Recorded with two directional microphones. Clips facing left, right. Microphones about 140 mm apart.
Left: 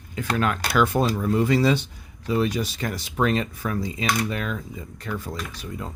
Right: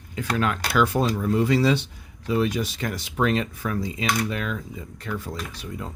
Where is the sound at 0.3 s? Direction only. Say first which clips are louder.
Left 1 dB; 50° left (ahead or behind).